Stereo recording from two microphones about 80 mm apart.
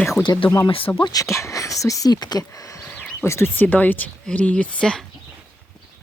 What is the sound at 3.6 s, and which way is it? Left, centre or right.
Speech, left.